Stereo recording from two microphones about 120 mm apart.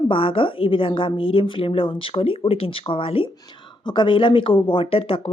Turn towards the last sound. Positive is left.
turn(degrees=50)  # may be behind; listen again after turning